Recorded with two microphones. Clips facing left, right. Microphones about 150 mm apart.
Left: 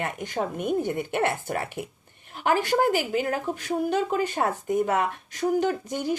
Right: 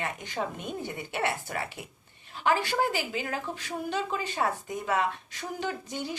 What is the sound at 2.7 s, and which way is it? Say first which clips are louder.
Speech: left 6 dB; 50° left (ahead or behind).